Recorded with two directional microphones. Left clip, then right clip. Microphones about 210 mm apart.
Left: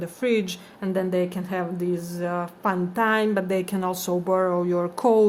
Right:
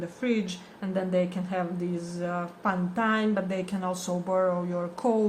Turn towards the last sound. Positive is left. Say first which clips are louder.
# left 7 dB
turn(degrees=55)  # may be behind; listen again after turning